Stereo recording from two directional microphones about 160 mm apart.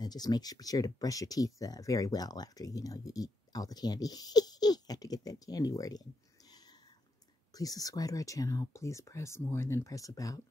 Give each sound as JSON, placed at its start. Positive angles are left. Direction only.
{"t": 0.0, "sound": "speech", "side_deg": 25}
{"t": 6.5, "sound": "a sound", "side_deg": 25}
{"t": 7.5, "sound": "speech", "side_deg": 25}